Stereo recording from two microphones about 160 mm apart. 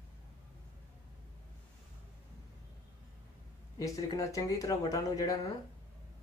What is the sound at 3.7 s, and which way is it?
Speech, 20° left (ahead or behind).